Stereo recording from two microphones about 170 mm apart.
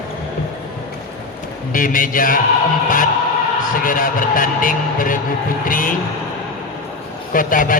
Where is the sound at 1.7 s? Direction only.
50° left (ahead or behind).